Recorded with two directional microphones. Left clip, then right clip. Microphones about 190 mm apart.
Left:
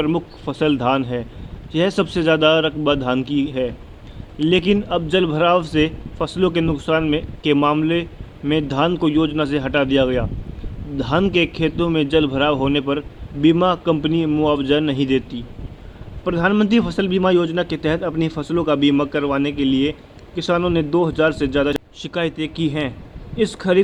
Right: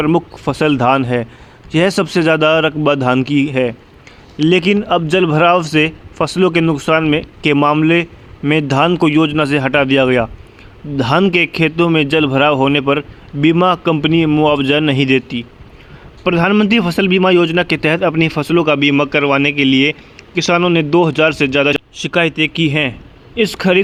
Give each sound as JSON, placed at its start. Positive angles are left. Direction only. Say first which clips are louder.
{"t": 0.0, "sound": "a man's voice", "louder": "right 6 dB", "side_deg": -30}